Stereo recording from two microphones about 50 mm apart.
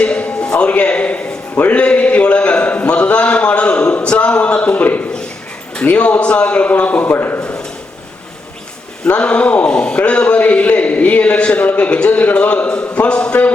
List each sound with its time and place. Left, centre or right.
0.0 s a sound: left
5.8 s a man's voice: left
7.2 s a man's voice: left
7.4 s a sound: centre
9.0 s a man's voice: left
9.6 s a man's voice: centre